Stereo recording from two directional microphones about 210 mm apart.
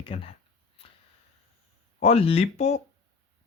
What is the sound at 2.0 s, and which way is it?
Speech, 30° left (ahead or behind).